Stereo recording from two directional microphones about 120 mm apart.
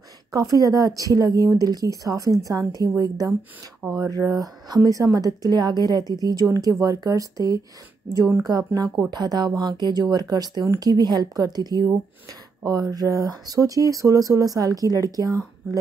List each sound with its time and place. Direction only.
0.3 s a woman's voice: 30° right (ahead or behind)
8.5 s a woman's voice: 30° right (ahead or behind)